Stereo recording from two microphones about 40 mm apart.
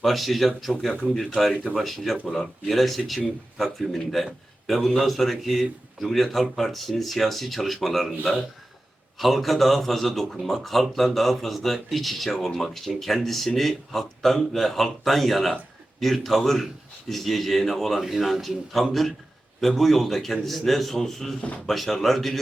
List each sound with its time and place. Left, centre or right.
0.0 s a man's voice: centre
1.7 s a man's voice: centre
2.2 s a man's voice: centre
18.0 s a man's voice: centre